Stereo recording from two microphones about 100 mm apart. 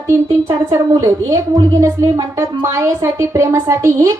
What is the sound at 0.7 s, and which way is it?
A woman's voice, 30° right (ahead or behind).